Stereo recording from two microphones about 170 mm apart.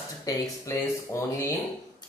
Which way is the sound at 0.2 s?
20° left (ahead or behind).